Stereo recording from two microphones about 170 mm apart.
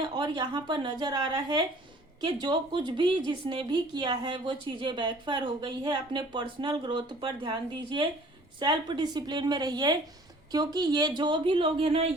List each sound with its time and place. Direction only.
0.0 s a woman's voice: 25° right (ahead or behind)